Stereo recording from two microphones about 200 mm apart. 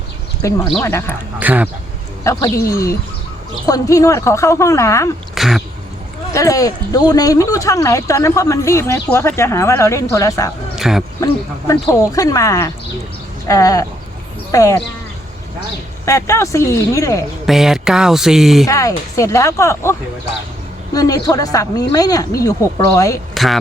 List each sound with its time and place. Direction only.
0.4 s speech: 15° left (ahead or behind)
1.4 s speech: 10° right (ahead or behind)
2.2 s speech: 15° left (ahead or behind)
5.3 s a sound: centre (ahead or behind)
6.3 s speech: 15° left (ahead or behind)
10.8 s a sound: centre (ahead or behind)
11.7 s speech: 15° left (ahead or behind)
16.0 s speech: 15° left (ahead or behind)
17.4 s speech: centre (ahead or behind)
18.6 s speech: 15° left (ahead or behind)
23.3 s a sound: centre (ahead or behind)